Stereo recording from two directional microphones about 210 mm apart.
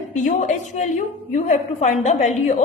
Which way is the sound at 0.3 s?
35° left (ahead or behind).